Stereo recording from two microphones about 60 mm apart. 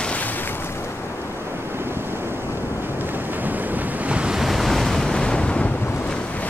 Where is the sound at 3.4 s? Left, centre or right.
Right.